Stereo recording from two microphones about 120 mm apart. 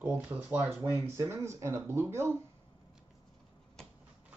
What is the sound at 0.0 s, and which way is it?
Speech, 15° right (ahead or behind).